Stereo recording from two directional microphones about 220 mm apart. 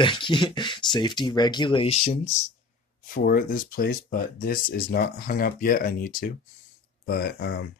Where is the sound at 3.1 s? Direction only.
40° left (ahead or behind).